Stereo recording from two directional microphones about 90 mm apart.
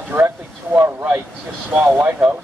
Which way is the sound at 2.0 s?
20° right (ahead or behind).